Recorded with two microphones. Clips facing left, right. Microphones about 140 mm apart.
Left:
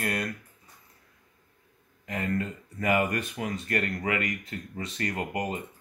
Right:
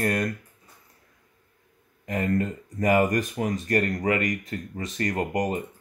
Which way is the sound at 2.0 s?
40° right (ahead or behind).